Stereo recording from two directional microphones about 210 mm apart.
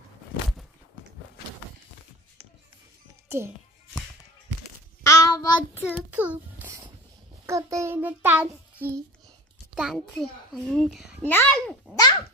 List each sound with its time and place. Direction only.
3.3 s a child's voice: 10° right (ahead or behind)
5.0 s child singing: 15° left (ahead or behind)
6.0 s a child's voice: 10° right (ahead or behind)
7.4 s child singing: 15° right (ahead or behind)
9.8 s a child's voice: centre (ahead or behind)
11.2 s a child's voice: 10° left (ahead or behind)
11.9 s a sound: 20° left (ahead or behind)